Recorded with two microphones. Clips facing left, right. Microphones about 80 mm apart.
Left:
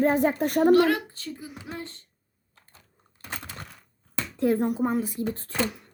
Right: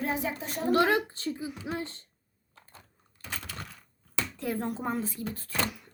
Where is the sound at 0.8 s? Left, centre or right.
Right.